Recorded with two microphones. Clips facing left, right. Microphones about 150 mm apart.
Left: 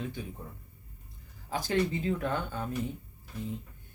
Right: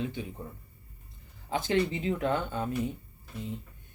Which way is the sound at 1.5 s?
25° right (ahead or behind).